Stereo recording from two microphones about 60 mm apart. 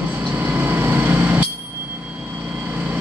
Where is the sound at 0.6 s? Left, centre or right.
Right.